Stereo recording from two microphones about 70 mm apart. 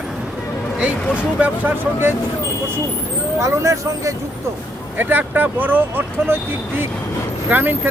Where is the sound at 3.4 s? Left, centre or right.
Right.